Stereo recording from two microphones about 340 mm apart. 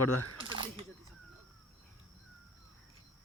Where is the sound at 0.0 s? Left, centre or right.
Left.